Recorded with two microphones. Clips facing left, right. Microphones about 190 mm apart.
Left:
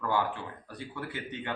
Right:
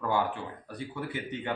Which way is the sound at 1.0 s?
20° right (ahead or behind).